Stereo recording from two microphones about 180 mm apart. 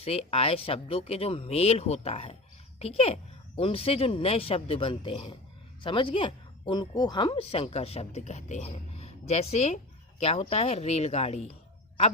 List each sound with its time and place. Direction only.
0.0 s a woman's voice: 35° left (ahead or behind)